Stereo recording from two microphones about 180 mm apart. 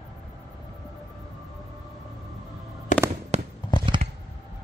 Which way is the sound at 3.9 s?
25° right (ahead or behind).